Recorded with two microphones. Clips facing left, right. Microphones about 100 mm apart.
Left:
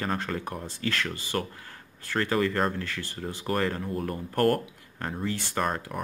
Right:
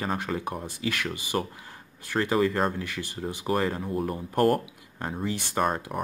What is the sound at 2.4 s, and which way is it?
Speech, 5° right (ahead or behind).